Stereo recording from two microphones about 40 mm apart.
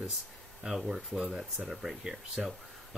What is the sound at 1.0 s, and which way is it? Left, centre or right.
Speech, right.